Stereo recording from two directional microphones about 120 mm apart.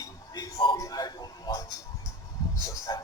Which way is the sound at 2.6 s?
30° left (ahead or behind).